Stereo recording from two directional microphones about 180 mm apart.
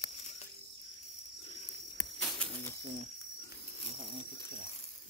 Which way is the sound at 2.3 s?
5° left (ahead or behind).